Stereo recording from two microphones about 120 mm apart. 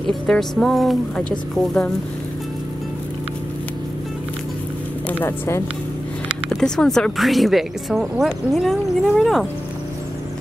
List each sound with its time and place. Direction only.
0.0 s speech: 5° left (ahead or behind)
6.5 s speech: 5° left (ahead or behind)